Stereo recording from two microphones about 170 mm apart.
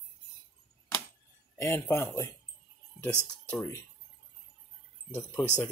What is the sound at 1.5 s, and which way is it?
Speech, 15° left (ahead or behind).